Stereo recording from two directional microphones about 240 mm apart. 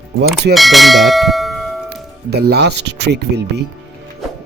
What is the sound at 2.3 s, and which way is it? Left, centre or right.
Speech, right.